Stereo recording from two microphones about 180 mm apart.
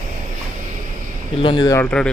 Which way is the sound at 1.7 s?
10° left (ahead or behind).